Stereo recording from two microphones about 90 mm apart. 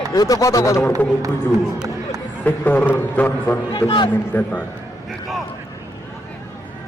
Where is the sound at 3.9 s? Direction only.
60° left (ahead or behind).